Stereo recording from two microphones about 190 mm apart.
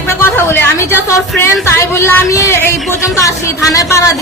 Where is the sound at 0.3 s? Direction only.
10° left (ahead or behind).